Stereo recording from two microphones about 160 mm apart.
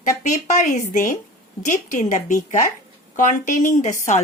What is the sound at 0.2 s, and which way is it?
A woman's voice, 50° left (ahead or behind).